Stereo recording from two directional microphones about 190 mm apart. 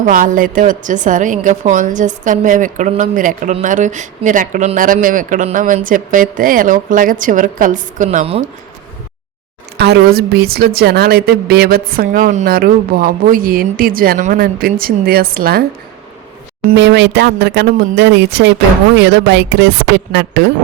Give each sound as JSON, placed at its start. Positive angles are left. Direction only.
{"t": 0.0, "sound": "a woman's voice", "side_deg": -45}
{"t": 9.7, "sound": "a woman's voice", "side_deg": -60}
{"t": 16.7, "sound": "speech", "side_deg": -70}